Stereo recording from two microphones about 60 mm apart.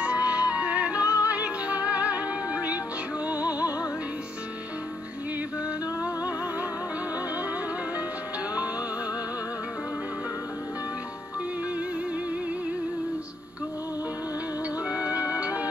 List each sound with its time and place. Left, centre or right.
0.0 s music: right
14.9 s music: right